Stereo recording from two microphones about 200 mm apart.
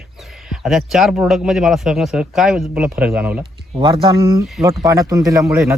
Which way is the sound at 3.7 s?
25° right (ahead or behind).